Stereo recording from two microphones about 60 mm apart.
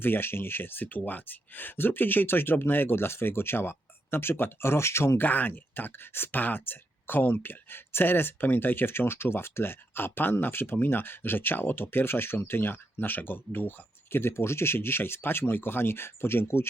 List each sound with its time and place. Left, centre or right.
0.0 s speech: left
5.2 s speech: left